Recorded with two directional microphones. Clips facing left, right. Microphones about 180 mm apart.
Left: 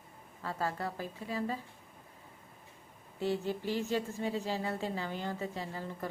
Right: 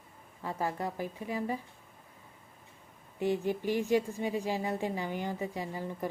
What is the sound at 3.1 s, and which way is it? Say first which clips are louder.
A woman's voice: right 3 dB; 15° right (ahead or behind).